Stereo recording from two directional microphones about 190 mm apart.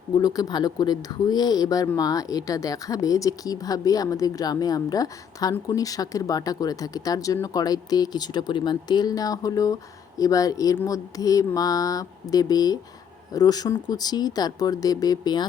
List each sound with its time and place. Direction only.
0.2 s speech: 20° left (ahead or behind)